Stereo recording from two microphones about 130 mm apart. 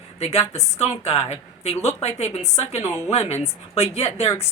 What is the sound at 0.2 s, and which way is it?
A woman's voice, 55° left (ahead or behind).